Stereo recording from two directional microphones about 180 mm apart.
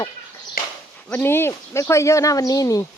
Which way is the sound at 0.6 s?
55° left (ahead or behind).